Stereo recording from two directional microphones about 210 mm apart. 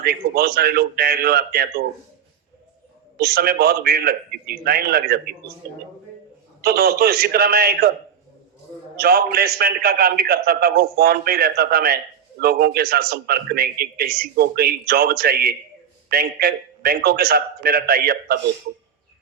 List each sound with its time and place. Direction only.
0.0 s a man's voice: 45° right (ahead or behind)
3.2 s a man's voice: 45° right (ahead or behind)
6.6 s a man's voice: 45° right (ahead or behind)
9.0 s a man's voice: 45° right (ahead or behind)